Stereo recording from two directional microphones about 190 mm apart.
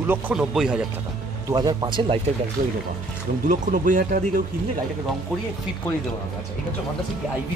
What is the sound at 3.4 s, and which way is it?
Speech, 45° right (ahead or behind).